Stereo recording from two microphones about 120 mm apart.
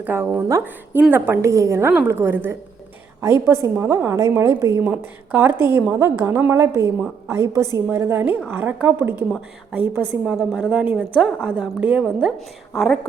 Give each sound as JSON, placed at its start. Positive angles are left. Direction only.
{"t": 0.0, "sound": "a woman's voice", "side_deg": -15}
{"t": 10.2, "sound": "a woman's voice", "side_deg": -5}
{"t": 12.7, "sound": "a woman's voice", "side_deg": 0}